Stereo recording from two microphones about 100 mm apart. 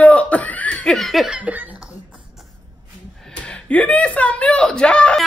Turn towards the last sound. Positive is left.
turn(degrees=10)  # may be behind; listen again after turning